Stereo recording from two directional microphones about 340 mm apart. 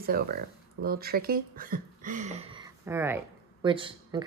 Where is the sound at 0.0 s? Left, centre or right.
Right.